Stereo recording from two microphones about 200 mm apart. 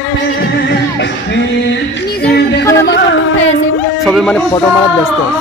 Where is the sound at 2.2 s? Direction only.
55° left (ahead or behind).